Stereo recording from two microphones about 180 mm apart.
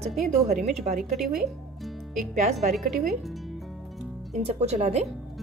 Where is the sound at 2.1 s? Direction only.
40° right (ahead or behind).